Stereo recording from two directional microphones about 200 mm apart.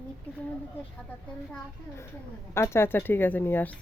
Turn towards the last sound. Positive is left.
turn(degrees=10)  # may be behind; listen again after turning